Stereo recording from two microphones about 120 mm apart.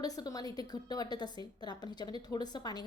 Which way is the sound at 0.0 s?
30° left (ahead or behind).